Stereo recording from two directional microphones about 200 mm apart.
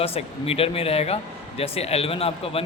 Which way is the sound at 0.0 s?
30° left (ahead or behind).